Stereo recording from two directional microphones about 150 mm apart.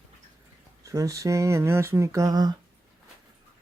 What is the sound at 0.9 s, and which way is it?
Speech, 20° right (ahead or behind).